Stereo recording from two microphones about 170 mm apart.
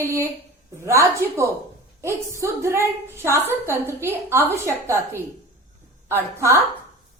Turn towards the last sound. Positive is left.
turn(degrees=-15)  # may be behind; listen again after turning